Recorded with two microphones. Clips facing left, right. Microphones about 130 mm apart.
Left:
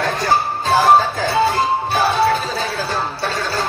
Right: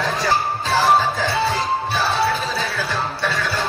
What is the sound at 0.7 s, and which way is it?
Music, 45° left (ahead or behind).